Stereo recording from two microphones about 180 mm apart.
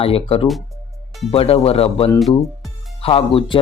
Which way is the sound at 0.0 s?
30° left (ahead or behind).